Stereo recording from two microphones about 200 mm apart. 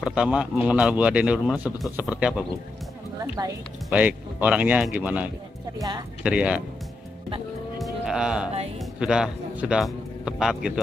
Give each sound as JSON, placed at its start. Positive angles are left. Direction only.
{"t": 0.0, "sound": "speech", "side_deg": -5}
{"t": 3.4, "sound": "speech", "side_deg": -20}
{"t": 3.9, "sound": "speech", "side_deg": -5}
{"t": 6.2, "sound": "speech", "side_deg": -5}
{"t": 7.8, "sound": "music", "side_deg": 0}
{"t": 8.7, "sound": "speech", "side_deg": -5}